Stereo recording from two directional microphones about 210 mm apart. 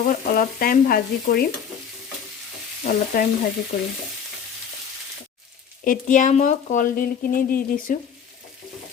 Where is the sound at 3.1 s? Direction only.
45° left (ahead or behind).